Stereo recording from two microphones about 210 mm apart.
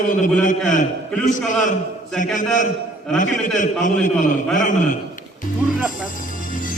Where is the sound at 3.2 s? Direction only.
35° left (ahead or behind).